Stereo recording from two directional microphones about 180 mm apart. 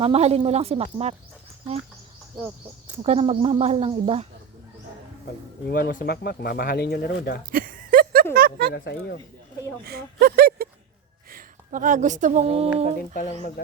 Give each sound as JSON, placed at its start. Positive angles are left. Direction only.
{"t": 0.0, "sound": "speech", "side_deg": -35}
{"t": 3.0, "sound": "speech", "side_deg": -30}
{"t": 5.6, "sound": "speech", "side_deg": 55}
{"t": 7.5, "sound": "a sound", "side_deg": -50}
{"t": 8.7, "sound": "speech", "side_deg": 70}
{"t": 9.8, "sound": "speech", "side_deg": -60}